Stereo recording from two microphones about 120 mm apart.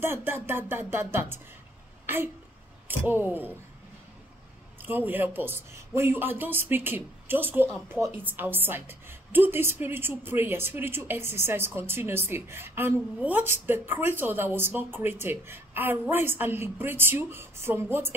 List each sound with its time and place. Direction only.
0.0 s a woman's voice: 20° right (ahead or behind)
4.8 s a woman's voice: 15° right (ahead or behind)